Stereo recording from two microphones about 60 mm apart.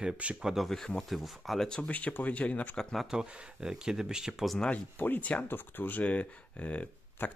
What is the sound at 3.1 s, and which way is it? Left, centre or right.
Speech, centre.